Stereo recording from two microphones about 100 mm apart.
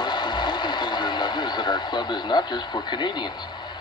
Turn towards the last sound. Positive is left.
turn(degrees=45)  # may be behind; listen again after turning